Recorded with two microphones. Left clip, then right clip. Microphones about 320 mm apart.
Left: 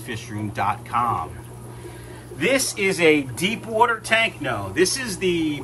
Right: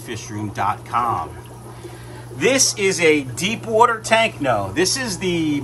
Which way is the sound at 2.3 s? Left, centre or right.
Centre.